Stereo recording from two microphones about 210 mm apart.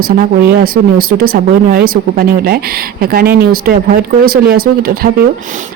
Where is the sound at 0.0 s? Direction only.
45° right (ahead or behind).